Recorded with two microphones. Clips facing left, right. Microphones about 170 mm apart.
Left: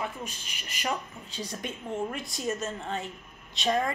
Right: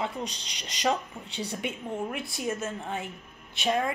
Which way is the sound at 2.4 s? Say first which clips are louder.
Left 1 dB; 10° right (ahead or behind).